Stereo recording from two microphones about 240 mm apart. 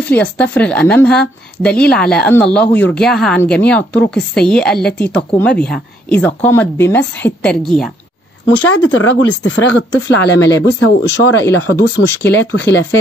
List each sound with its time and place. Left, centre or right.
0.0 s a woman's voice: centre
8.6 s speech: left
11.4 s speech: centre